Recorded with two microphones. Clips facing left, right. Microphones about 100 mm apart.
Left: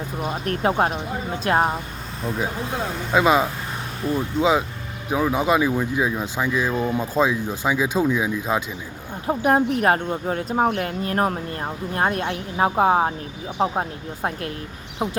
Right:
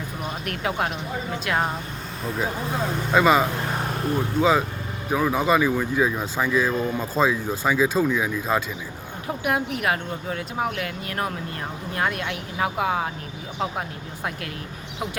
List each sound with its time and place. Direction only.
0.4 s speech: 35° left (ahead or behind)
3.1 s speech: 5° left (ahead or behind)
9.2 s speech: 35° left (ahead or behind)